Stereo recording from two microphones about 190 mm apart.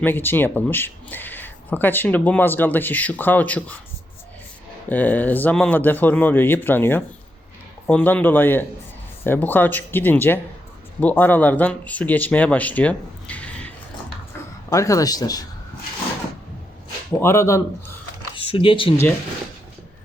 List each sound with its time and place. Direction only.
0.0 s speech: 10° left (ahead or behind)
4.9 s speech: 10° left (ahead or behind)
17.1 s speech: 10° left (ahead or behind)
18.3 s speech: 30° left (ahead or behind)